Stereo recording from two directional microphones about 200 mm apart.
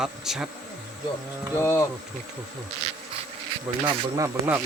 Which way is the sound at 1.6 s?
15° left (ahead or behind).